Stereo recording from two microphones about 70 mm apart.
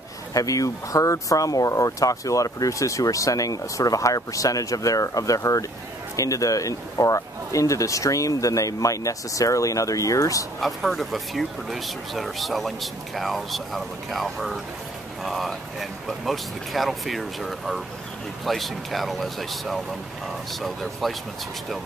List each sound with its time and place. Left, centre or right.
0.3 s speech: left
10.6 s speech: centre